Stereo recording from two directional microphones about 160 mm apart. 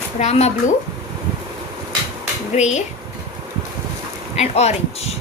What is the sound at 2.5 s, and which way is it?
Speech, 45° left (ahead or behind).